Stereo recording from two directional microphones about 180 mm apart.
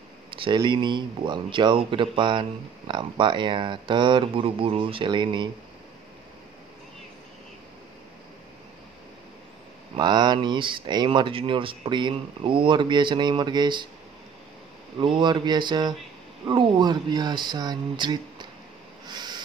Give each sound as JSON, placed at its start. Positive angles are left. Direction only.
{"t": 0.3, "sound": "speech", "side_deg": -25}
{"t": 9.9, "sound": "speech", "side_deg": -25}
{"t": 15.0, "sound": "speech", "side_deg": -25}
{"t": 19.0, "sound": "train", "side_deg": -25}